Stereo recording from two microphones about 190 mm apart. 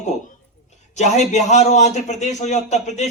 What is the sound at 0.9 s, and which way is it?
A man's voice, 35° left (ahead or behind).